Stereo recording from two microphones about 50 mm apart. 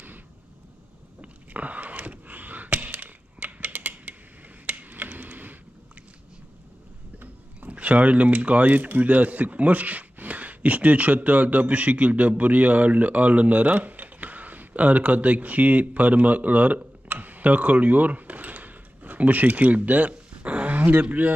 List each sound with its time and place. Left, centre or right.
1.2 s a sound: right
4.6 s tick-tock: right
7.2 s speech: right